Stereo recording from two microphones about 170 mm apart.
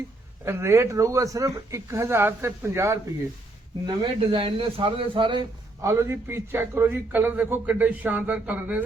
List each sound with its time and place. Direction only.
0.4 s a man's voice: 15° right (ahead or behind)
3.8 s speech: 30° right (ahead or behind)
5.9 s a man's voice: 15° right (ahead or behind)